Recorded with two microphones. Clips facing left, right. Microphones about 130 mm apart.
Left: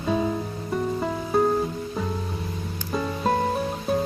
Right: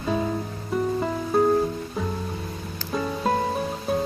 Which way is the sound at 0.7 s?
Centre (ahead or behind).